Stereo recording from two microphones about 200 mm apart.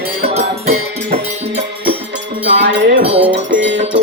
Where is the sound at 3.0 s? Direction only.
30° right (ahead or behind).